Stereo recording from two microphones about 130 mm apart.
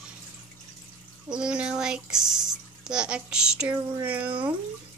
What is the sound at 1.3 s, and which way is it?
A woman's voice, 5° right (ahead or behind).